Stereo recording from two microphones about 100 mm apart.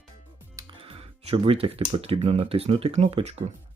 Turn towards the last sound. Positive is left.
turn(degrees=-90)